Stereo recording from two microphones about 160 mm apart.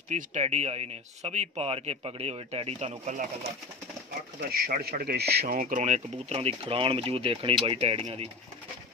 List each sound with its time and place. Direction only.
0.1 s a man's voice: 45° right (ahead or behind)
4.4 s a man's voice: 70° right (ahead or behind); by 8.3 s 40° right (ahead or behind)